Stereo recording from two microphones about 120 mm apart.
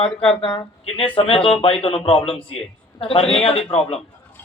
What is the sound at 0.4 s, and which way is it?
Speech, 50° left (ahead or behind).